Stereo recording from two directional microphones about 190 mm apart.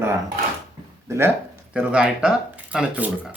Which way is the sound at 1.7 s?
5° right (ahead or behind).